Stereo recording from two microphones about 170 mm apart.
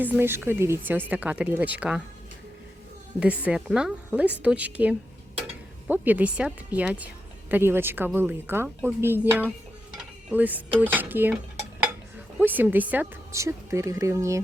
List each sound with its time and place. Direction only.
0.0 s a woman's voice: 10° right (ahead or behind)
3.2 s a woman's voice: 5° right (ahead or behind)
12.4 s a woman's voice: 10° right (ahead or behind)